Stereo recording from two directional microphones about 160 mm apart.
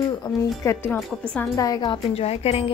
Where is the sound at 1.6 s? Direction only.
25° left (ahead or behind).